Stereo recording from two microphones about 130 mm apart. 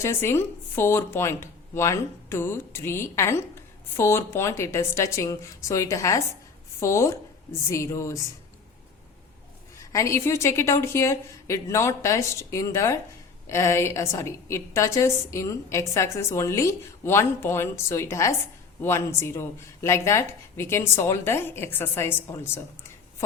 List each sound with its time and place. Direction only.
0.0 s speech: 20° left (ahead or behind)
9.7 s speech: 25° left (ahead or behind)